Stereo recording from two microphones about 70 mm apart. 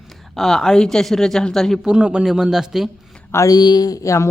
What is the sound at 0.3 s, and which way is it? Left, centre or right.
Speech, centre.